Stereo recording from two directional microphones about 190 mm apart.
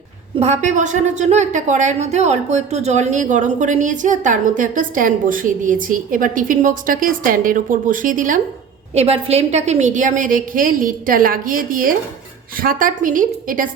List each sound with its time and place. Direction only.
0.3 s a woman's voice: 35° right (ahead or behind)
9.0 s a woman's voice: 30° right (ahead or behind)